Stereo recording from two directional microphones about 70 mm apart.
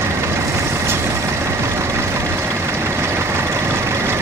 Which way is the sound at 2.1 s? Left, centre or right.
Right.